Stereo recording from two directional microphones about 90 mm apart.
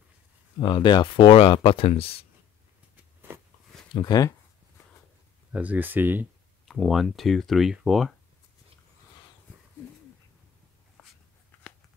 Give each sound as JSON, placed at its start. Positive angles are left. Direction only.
{"t": 0.6, "sound": "speech", "side_deg": 65}
{"t": 4.0, "sound": "speech", "side_deg": 45}
{"t": 5.5, "sound": "speech", "side_deg": -15}
{"t": 6.7, "sound": "speech", "side_deg": 0}